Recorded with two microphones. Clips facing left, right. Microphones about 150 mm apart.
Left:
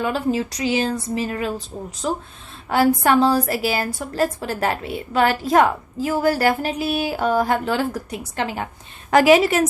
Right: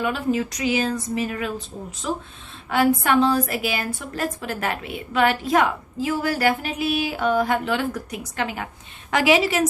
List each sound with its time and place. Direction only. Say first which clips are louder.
0.0 s a woman's voice: left 1 dB; 30° left (ahead or behind); by 9.6 s 50° left (ahead or behind)